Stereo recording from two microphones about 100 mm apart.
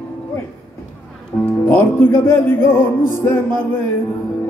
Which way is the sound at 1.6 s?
25° left (ahead or behind).